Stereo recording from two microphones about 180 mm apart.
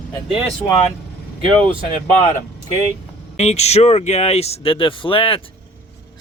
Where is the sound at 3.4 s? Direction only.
35° left (ahead or behind).